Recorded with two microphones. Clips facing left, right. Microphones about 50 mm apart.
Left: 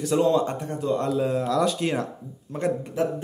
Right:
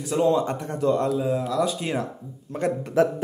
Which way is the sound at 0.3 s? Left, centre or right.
Right.